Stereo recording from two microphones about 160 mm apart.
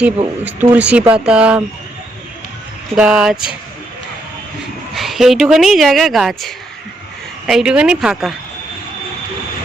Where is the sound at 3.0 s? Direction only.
5° right (ahead or behind).